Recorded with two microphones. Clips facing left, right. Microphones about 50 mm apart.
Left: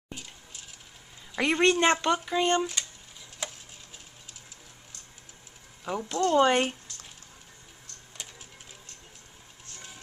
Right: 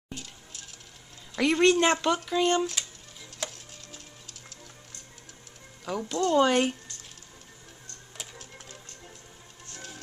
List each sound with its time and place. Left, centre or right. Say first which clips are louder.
0.1 s a sound: right 1 dB; centre
1.3 s speech: right 2 dB; centre
2.7 s music: even; centre
5.9 s speech: even; centre